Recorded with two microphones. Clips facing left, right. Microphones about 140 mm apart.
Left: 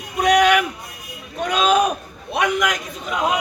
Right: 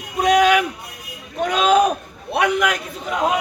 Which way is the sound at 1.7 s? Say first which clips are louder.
Right 2 dB; 30° right (ahead or behind).